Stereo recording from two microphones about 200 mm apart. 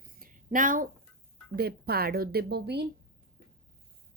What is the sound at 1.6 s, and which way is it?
Speech, 50° right (ahead or behind).